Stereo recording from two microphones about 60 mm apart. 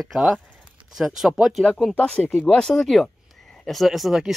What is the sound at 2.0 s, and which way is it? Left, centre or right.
Speech, left.